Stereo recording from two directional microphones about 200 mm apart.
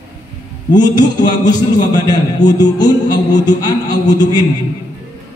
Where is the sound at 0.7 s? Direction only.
20° left (ahead or behind).